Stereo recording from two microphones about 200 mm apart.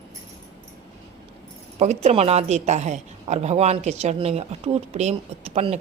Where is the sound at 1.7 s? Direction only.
35° right (ahead or behind).